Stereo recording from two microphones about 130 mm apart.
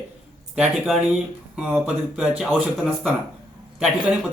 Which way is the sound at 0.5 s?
5° right (ahead or behind).